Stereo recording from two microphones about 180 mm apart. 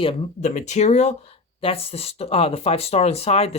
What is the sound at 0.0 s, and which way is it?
Speech, 35° left (ahead or behind).